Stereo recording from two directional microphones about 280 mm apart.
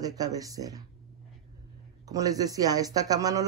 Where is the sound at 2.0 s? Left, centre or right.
Centre.